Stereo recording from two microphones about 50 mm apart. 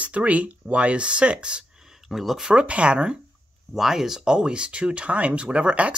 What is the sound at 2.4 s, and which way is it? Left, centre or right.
Speech, right.